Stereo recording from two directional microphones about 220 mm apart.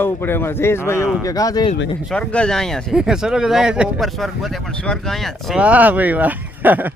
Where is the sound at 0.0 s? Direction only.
10° left (ahead or behind).